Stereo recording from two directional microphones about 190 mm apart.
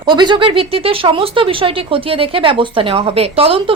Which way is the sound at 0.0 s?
25° right (ahead or behind).